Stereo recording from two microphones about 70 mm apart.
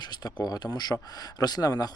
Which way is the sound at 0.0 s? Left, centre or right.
Left.